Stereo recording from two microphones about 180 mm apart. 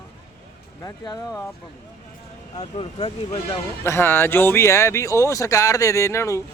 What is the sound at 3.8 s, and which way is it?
Speech, 15° left (ahead or behind).